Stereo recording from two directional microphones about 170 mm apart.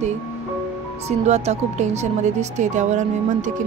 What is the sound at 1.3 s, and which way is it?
Speech, 40° right (ahead or behind).